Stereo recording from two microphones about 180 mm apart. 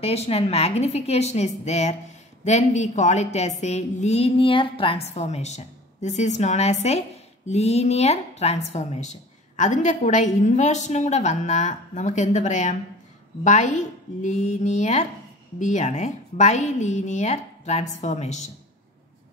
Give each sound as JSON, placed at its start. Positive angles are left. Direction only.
{"t": 0.0, "sound": "a woman's voice", "side_deg": 35}